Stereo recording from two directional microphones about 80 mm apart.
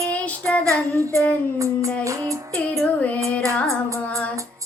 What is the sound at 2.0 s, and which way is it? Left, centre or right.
Music, right.